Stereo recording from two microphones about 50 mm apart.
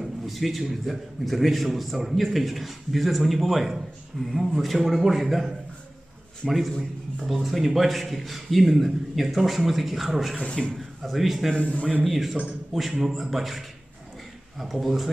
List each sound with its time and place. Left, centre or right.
0.0 s a man's voice: centre
11.5 s a man's voice: left
12.0 s a man's voice: centre